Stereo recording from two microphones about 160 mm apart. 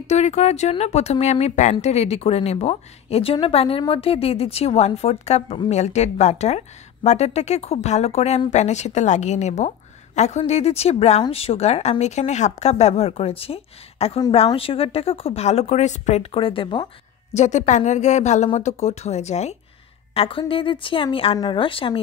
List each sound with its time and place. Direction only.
0.0 s a woman's voice: 45° left (ahead or behind)
17.3 s a woman's voice: 45° left (ahead or behind)